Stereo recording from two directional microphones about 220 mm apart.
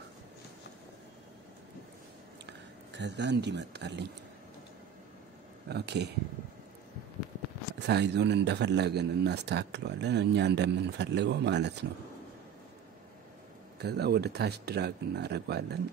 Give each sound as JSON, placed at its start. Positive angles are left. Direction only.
{"t": 3.0, "sound": "speech", "side_deg": -50}
{"t": 5.7, "sound": "speech", "side_deg": -50}
{"t": 7.8, "sound": "speech", "side_deg": -50}
{"t": 13.7, "sound": "speech", "side_deg": -50}